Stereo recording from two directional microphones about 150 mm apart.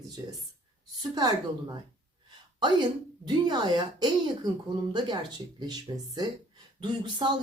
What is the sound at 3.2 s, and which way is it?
Speech, 30° right (ahead or behind).